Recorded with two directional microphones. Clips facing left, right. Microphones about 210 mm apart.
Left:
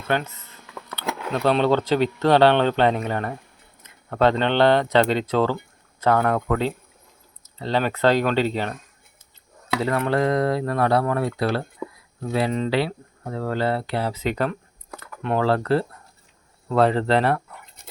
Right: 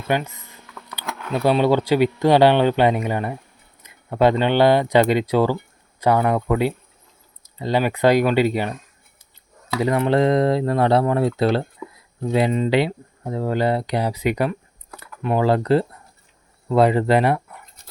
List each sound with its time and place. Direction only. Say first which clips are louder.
0.1 s speech: right 2 dB; 15° right (ahead or behind)
9.8 s speech: right 4 dB; 20° right (ahead or behind)